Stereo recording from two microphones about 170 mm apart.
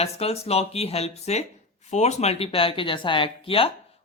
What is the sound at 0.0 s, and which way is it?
Speech, 35° left (ahead or behind).